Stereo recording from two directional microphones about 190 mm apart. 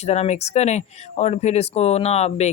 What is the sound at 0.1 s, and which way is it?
Speech, 35° left (ahead or behind).